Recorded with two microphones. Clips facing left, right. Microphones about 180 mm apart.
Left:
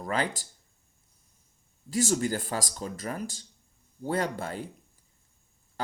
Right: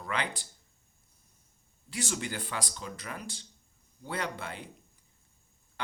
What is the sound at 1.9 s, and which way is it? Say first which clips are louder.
Speech: left 9 dB; 40° left (ahead or behind).